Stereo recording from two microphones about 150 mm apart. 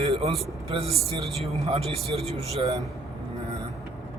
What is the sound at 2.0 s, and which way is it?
Speech, 40° right (ahead or behind).